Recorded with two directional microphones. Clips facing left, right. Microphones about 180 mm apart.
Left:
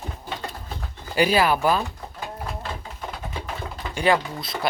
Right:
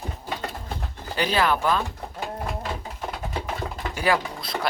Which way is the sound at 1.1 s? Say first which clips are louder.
Left 3 dB; 10° left (ahead or behind).